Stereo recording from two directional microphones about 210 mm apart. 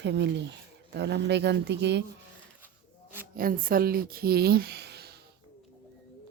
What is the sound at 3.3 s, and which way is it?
Speech, 45° right (ahead or behind).